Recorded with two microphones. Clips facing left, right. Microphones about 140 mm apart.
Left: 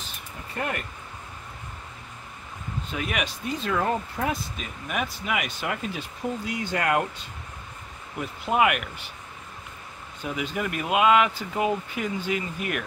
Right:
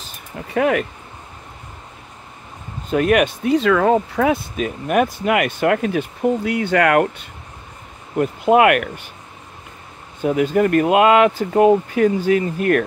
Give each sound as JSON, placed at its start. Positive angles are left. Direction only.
{"t": 0.4, "sound": "speech", "side_deg": -90}
{"t": 2.9, "sound": "speech", "side_deg": -55}
{"t": 8.2, "sound": "speech", "side_deg": -60}
{"t": 10.2, "sound": "speech", "side_deg": -50}